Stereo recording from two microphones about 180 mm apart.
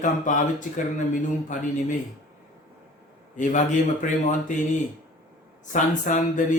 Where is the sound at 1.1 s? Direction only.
45° left (ahead or behind).